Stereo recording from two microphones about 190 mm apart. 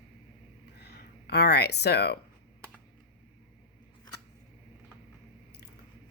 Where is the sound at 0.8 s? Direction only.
60° left (ahead or behind).